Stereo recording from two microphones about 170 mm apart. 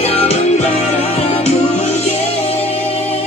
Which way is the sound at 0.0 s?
35° left (ahead or behind).